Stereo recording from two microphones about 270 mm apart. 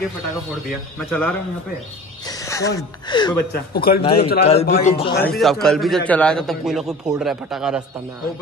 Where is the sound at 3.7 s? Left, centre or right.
Left.